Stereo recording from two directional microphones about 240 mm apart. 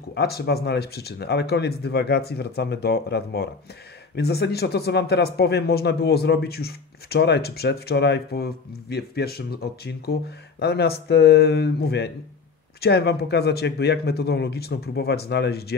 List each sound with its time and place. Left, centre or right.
0.1 s speech: left